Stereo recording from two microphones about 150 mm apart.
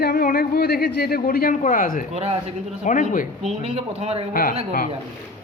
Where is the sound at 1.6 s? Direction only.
65° left (ahead or behind).